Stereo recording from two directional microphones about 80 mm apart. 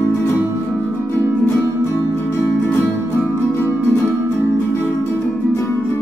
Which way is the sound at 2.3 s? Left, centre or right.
Left.